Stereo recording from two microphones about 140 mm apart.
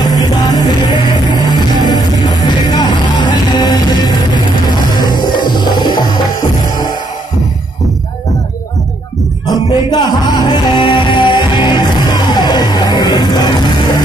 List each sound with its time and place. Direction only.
0.0 s music: 30° left (ahead or behind)
9.5 s music: 30° left (ahead or behind)